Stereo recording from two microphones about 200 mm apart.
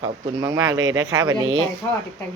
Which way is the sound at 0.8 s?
70° right (ahead or behind).